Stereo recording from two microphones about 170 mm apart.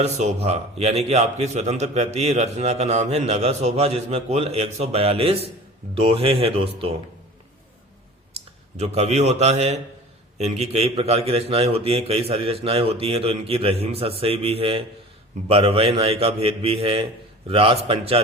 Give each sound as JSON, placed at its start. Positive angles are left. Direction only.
{"t": 0.0, "sound": "a man's voice", "side_deg": -40}
{"t": 8.8, "sound": "a man's voice", "side_deg": -40}